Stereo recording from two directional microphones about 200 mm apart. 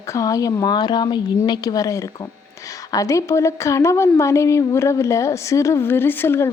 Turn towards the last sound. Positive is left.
turn(degrees=10)  # may be behind; listen again after turning